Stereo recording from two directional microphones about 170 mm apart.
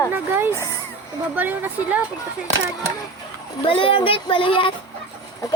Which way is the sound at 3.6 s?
30° left (ahead or behind).